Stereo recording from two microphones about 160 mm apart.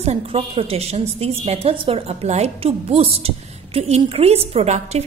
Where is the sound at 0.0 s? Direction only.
40° right (ahead or behind).